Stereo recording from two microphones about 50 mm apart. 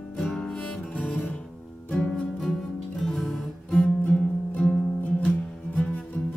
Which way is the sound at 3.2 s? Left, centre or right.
Centre.